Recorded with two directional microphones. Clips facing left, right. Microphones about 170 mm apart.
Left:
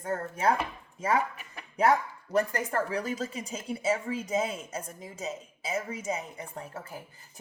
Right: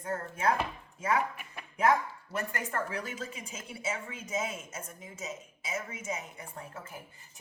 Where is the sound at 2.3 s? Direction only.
35° left (ahead or behind).